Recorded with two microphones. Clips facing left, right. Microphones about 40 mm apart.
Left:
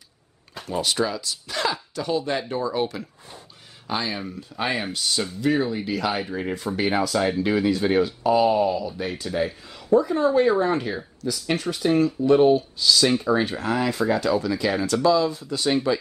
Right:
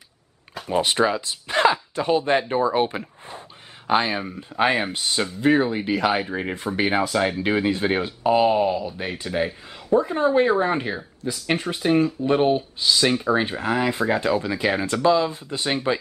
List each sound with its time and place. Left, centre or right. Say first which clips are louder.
0.7 s speech: right 4 dB; right